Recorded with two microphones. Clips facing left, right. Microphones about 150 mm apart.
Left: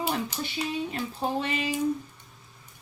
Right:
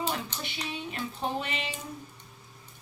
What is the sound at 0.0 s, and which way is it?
Child singing, 10° left (ahead or behind).